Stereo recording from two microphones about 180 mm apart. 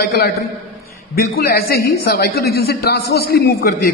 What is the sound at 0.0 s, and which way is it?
Speech, 60° left (ahead or behind).